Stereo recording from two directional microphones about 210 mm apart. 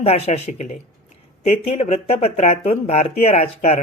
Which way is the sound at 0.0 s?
30° left (ahead or behind).